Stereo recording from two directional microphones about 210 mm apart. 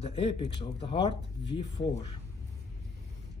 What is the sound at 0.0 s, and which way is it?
Speech, 25° left (ahead or behind).